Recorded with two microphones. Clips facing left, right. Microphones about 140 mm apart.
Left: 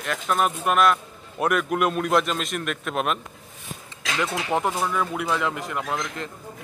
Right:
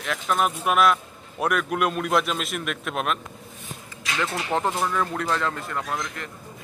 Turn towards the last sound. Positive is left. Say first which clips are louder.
# left 2 dB
turn(degrees=20)  # may be behind; listen again after turning